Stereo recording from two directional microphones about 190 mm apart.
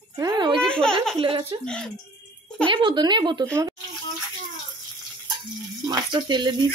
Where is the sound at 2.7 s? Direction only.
25° right (ahead or behind).